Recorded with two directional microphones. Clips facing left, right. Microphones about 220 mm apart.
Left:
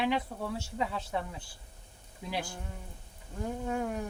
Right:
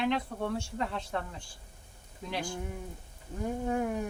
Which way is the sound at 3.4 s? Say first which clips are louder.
Right 2 dB; 15° right (ahead or behind).